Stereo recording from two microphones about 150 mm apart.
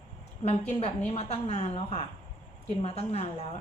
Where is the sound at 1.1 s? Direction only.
45° left (ahead or behind).